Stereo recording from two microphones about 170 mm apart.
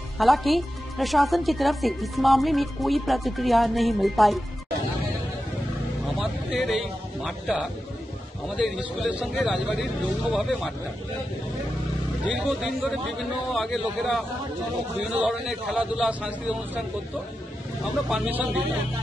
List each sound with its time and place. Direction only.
0.2 s a woman's voice: centre (ahead or behind)
6.1 s a woman's voice: 5° right (ahead or behind)
12.3 s a woman's voice: 5° right (ahead or behind)
18.1 s a woman's voice: 5° right (ahead or behind)